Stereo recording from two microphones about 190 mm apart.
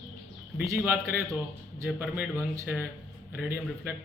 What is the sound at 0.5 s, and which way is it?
A man's voice, 10° right (ahead or behind).